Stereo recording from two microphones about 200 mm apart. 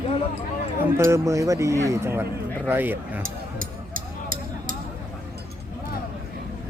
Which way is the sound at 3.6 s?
45° right (ahead or behind).